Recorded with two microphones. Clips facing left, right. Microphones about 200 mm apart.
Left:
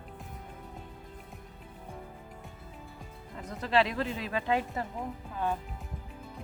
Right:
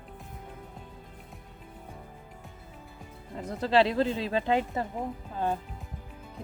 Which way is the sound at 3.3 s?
30° right (ahead or behind).